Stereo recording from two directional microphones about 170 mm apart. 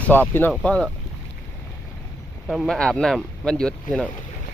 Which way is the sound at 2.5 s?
Centre (ahead or behind).